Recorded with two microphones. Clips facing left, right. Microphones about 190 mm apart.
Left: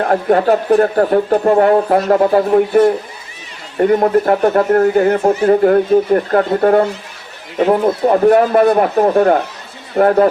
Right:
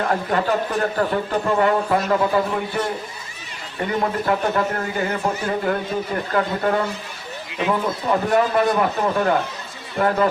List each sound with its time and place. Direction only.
0.0 s speech: 50° left (ahead or behind)